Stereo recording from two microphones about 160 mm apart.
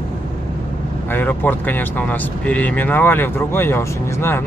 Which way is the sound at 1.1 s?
10° left (ahead or behind).